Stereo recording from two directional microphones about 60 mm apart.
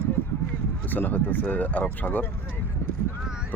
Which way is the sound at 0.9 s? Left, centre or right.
Left.